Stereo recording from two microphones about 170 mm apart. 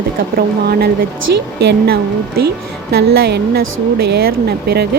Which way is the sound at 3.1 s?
75° right (ahead or behind).